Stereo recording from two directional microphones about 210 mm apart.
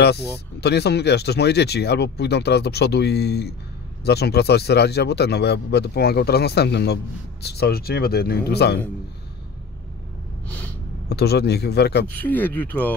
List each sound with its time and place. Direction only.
0.0 s speech: 50° left (ahead or behind)
11.1 s speech: 50° left (ahead or behind)
12.2 s speech: 10° left (ahead or behind)